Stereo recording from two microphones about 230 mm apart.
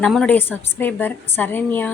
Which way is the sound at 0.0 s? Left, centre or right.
Centre.